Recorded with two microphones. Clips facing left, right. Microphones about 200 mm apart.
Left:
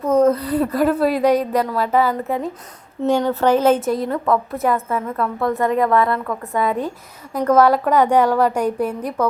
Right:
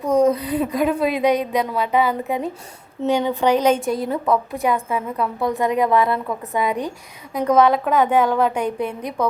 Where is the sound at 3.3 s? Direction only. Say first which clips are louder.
Left 2 dB; 5° left (ahead or behind).